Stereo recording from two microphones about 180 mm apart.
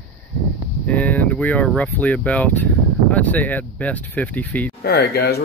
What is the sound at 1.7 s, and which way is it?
Speech, 5° left (ahead or behind).